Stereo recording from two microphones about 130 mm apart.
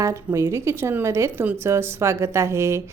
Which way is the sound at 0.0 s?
20° right (ahead or behind).